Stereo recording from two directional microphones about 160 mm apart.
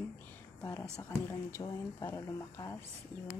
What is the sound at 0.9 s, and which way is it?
Speech, 15° left (ahead or behind).